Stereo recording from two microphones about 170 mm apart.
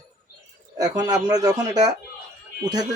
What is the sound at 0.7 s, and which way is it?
Speech, 20° right (ahead or behind).